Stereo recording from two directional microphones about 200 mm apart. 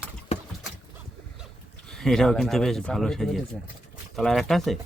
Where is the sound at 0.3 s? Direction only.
30° left (ahead or behind).